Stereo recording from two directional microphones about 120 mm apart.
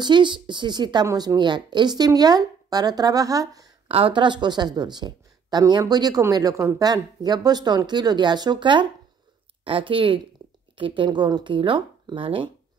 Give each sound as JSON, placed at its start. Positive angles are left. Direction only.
{"t": 0.0, "sound": "a woman's voice", "side_deg": -40}
{"t": 3.9, "sound": "a woman's voice", "side_deg": -45}